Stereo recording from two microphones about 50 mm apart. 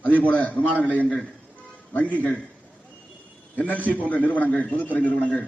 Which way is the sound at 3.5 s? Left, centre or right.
Left.